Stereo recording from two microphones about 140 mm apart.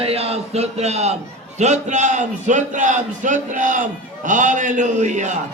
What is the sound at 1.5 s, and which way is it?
A man's voice, 55° right (ahead or behind).